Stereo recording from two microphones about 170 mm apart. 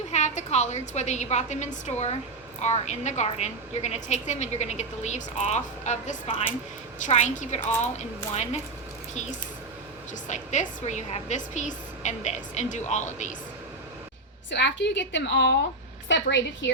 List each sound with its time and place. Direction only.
0.1 s a woman's voice: 40° left (ahead or behind)
10.2 s a woman's voice: 45° left (ahead or behind)
14.5 s a woman's voice: 90° left